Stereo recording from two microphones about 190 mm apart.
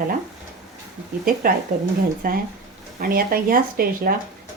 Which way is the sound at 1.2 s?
50° right (ahead or behind).